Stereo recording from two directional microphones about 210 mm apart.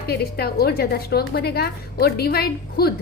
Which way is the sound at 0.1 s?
50° left (ahead or behind).